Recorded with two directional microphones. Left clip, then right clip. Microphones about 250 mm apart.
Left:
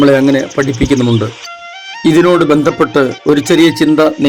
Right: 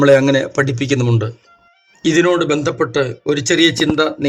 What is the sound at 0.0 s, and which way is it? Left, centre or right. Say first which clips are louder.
Speech: left 2 dB; centre.